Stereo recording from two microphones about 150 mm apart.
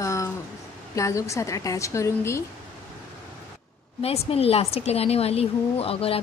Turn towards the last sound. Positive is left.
turn(degrees=40)  # may be behind; listen again after turning